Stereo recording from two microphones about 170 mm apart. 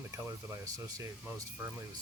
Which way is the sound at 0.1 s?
20° right (ahead or behind).